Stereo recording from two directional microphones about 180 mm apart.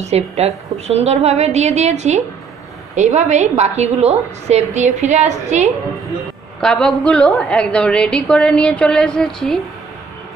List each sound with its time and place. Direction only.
0.0 s a woman's voice: 35° right (ahead or behind)
6.6 s a woman's voice: 5° left (ahead or behind)